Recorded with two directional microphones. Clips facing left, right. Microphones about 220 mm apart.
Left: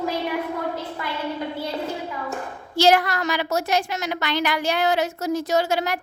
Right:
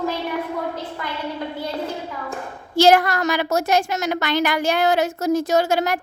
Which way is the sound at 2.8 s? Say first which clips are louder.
Right 3 dB; 45° right (ahead or behind).